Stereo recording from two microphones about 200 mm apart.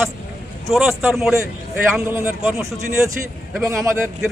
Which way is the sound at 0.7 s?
Centre (ahead or behind).